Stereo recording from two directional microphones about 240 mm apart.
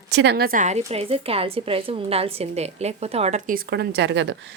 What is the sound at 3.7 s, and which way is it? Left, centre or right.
Speech, right.